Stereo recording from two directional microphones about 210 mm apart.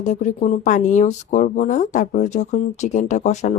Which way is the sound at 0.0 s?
35° left (ahead or behind).